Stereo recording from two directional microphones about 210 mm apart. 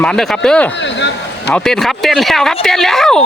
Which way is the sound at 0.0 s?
5° left (ahead or behind).